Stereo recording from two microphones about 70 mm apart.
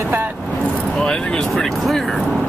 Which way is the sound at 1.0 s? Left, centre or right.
Centre.